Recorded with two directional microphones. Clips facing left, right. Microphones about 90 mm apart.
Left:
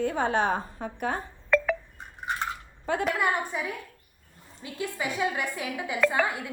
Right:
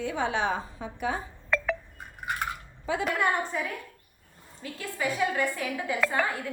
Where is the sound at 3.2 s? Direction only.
15° left (ahead or behind).